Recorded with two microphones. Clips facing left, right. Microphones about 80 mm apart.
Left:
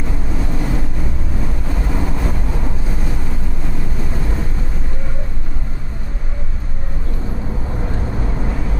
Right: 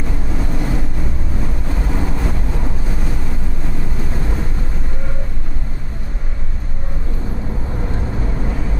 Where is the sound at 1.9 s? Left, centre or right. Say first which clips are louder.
Even; centre.